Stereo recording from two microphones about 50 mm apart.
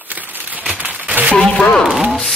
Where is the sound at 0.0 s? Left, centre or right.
Right.